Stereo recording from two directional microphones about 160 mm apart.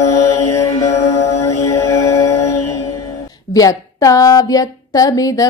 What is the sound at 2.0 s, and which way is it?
Music, 20° left (ahead or behind).